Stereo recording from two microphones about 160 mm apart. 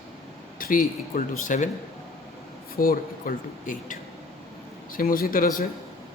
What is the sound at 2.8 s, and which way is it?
Speech, 65° left (ahead or behind).